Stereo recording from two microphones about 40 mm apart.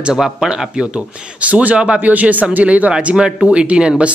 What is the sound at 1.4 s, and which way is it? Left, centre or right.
Speech, right.